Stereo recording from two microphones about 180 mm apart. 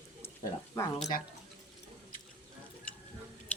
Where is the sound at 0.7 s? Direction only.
15° left (ahead or behind).